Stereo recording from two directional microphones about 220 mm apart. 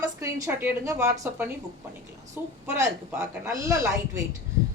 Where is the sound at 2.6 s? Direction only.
10° right (ahead or behind).